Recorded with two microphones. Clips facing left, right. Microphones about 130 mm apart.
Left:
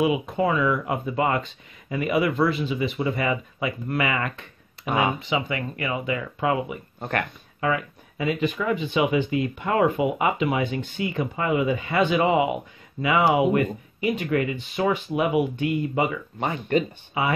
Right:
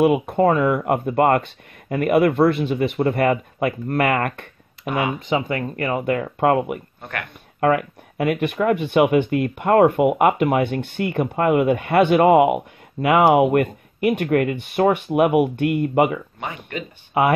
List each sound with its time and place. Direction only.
0.0 s speech: 55° right (ahead or behind)
7.0 s speech: 35° left (ahead or behind)
7.6 s speech: 60° right (ahead or behind)
16.3 s speech: 35° left (ahead or behind)
17.1 s speech: 60° right (ahead or behind)